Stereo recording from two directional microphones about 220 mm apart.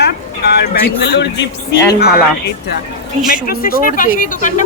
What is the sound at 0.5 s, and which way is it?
Speech, 50° left (ahead or behind).